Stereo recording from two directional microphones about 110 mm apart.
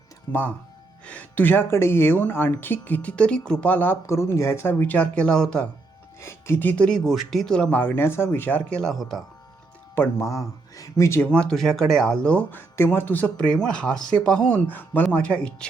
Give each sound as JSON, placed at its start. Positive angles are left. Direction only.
{"t": 1.0, "sound": "speech", "side_deg": 15}
{"t": 6.1, "sound": "speech", "side_deg": 25}
{"t": 8.8, "sound": "speech", "side_deg": 0}
{"t": 9.9, "sound": "speech", "side_deg": 25}
{"t": 11.2, "sound": "speech", "side_deg": 10}